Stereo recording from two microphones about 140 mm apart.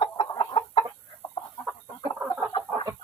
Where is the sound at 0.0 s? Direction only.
40° left (ahead or behind).